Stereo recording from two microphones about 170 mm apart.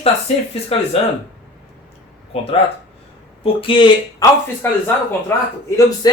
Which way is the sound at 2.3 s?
35° left (ahead or behind).